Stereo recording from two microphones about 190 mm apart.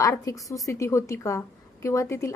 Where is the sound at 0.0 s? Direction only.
15° left (ahead or behind).